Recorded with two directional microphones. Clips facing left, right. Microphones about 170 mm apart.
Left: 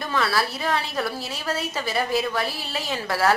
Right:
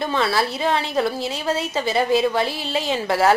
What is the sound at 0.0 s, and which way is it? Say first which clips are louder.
A woman's voice: right 3 dB; 25° right (ahead or behind).